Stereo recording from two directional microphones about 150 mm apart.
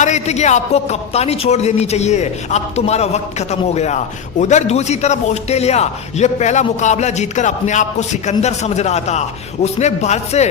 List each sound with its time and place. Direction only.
0.0 s speech: 50° left (ahead or behind)